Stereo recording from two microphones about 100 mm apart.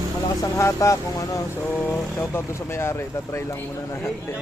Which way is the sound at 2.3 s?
25° left (ahead or behind).